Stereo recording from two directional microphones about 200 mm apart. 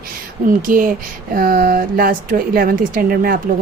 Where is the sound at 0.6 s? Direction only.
45° right (ahead or behind).